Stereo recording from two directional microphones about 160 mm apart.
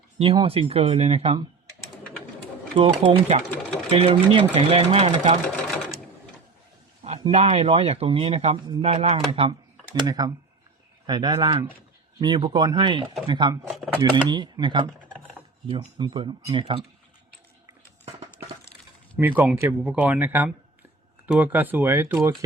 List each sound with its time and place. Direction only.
0.2 s speech: 35° right (ahead or behind)
2.7 s speech: 35° right (ahead or behind)
5.5 s sewing machine: 10° left (ahead or behind)
7.0 s speech: 40° right (ahead or behind)
19.1 s speech: 10° right (ahead or behind)